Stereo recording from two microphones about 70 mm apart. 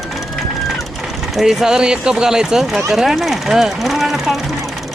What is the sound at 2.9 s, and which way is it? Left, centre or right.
Speech, centre.